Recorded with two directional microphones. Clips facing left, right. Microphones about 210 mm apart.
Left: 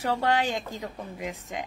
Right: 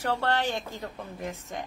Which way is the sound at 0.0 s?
15° left (ahead or behind).